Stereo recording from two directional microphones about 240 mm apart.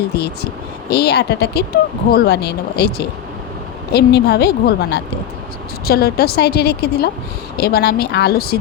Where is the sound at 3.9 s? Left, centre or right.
Left.